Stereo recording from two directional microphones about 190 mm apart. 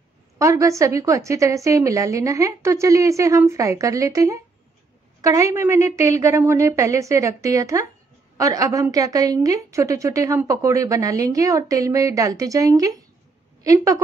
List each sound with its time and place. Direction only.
0.4 s a woman's voice: 15° right (ahead or behind)